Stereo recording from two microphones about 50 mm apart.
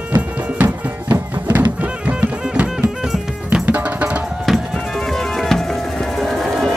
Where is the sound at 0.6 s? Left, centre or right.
Right.